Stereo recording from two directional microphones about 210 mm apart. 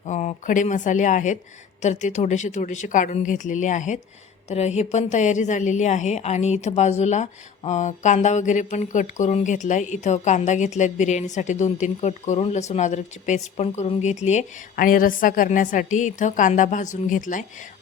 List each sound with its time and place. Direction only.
0.0 s a woman's voice: 35° left (ahead or behind)